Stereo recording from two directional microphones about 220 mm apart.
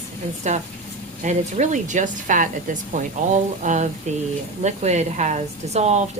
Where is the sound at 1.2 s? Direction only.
35° right (ahead or behind).